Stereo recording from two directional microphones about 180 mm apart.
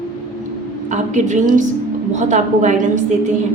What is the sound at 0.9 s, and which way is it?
A woman's voice, 40° right (ahead or behind).